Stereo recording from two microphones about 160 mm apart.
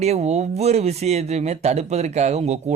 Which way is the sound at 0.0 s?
45° right (ahead or behind).